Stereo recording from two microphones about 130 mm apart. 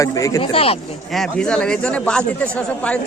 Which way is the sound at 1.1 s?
5° left (ahead or behind).